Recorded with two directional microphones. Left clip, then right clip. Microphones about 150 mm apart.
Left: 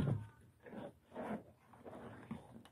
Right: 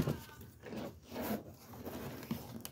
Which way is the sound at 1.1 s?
15° left (ahead or behind).